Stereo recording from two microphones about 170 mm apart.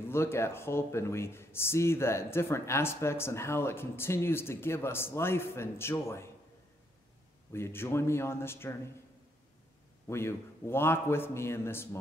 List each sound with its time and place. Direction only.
0.1 s speech: 15° left (ahead or behind)
7.5 s speech: 15° left (ahead or behind)
10.0 s speech: 15° left (ahead or behind)